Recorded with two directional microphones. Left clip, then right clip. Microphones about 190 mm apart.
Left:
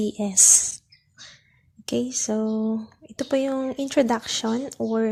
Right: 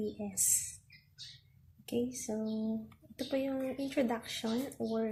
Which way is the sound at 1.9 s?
50° left (ahead or behind).